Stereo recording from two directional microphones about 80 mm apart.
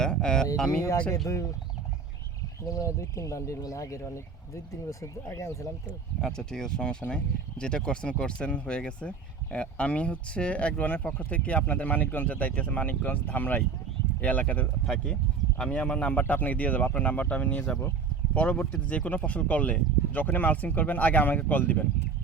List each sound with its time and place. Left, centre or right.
0.0 s a sound: centre
0.5 s speech: centre
2.6 s speech: left
6.2 s speech: centre